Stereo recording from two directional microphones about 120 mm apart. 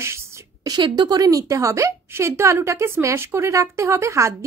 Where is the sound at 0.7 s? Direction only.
40° right (ahead or behind).